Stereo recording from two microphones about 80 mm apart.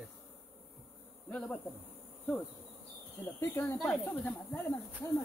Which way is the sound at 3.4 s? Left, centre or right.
Left.